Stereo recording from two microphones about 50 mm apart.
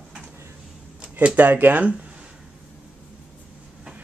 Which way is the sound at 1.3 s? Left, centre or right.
Right.